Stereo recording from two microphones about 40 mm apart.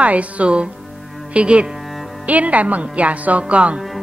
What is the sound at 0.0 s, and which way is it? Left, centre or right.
Speech, right.